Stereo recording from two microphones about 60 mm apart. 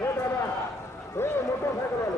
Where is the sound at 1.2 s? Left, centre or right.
Left.